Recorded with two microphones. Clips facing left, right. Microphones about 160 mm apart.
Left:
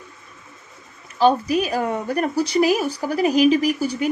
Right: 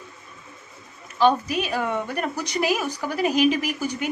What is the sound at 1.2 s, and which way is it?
Speech, 40° left (ahead or behind).